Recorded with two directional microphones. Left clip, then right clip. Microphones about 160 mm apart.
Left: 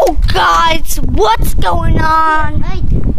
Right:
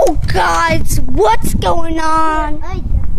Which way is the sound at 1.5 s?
15° right (ahead or behind).